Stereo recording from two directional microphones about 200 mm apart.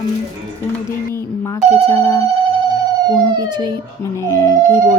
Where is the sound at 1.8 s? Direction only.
15° left (ahead or behind).